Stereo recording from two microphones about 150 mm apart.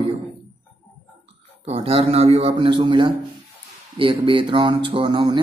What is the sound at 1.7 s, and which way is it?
A man's voice, 45° right (ahead or behind).